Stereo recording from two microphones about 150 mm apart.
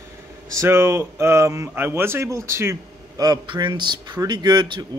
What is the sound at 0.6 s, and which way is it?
Speech, 15° right (ahead or behind).